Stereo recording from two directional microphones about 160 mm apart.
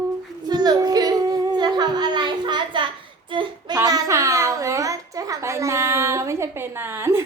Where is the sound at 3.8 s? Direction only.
20° right (ahead or behind).